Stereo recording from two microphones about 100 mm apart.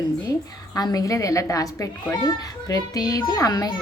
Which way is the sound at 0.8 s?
40° left (ahead or behind).